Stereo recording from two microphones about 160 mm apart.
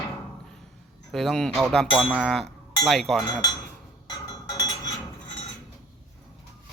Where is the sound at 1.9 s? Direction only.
10° right (ahead or behind).